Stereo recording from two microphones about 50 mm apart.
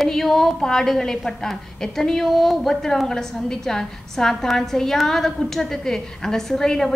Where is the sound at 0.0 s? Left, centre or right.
Centre.